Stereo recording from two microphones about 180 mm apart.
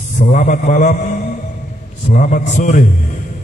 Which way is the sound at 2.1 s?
45° left (ahead or behind).